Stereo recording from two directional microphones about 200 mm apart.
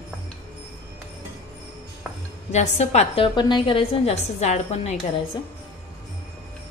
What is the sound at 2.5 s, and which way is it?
A woman's voice, 35° left (ahead or behind).